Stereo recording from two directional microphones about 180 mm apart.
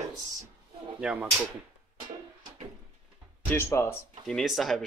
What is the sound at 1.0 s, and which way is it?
Speech, 10° right (ahead or behind).